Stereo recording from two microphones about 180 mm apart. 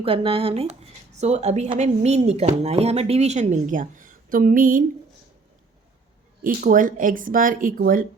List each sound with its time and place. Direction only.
0.0 s speech: 30° right (ahead or behind); by 4.8 s 50° right (ahead or behind)
6.4 s speech: 50° right (ahead or behind)